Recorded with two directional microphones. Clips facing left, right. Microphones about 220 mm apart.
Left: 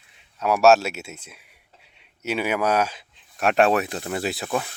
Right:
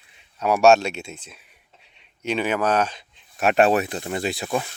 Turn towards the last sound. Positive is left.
turn(degrees=0)  # may be behind; listen again after turning